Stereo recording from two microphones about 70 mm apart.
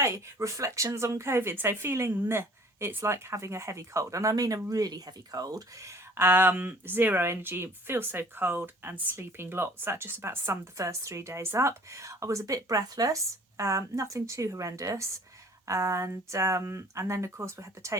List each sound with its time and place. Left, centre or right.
0.0 s speech: right
6.1 s speech: right
10.8 s speech: right